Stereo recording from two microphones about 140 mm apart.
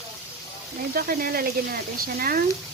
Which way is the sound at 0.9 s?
90° right.